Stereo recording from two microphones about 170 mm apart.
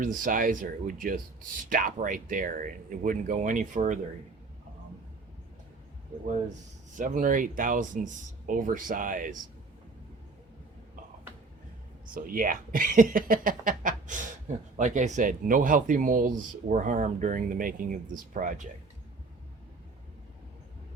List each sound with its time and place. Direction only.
0.0 s speech: 55° right (ahead or behind)
6.9 s speech: 50° right (ahead or behind)
12.1 s speech: 55° right (ahead or behind)